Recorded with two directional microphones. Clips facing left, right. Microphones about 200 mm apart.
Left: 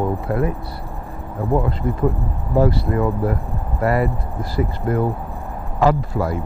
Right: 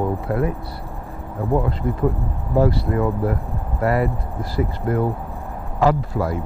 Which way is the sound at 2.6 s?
25° left (ahead or behind).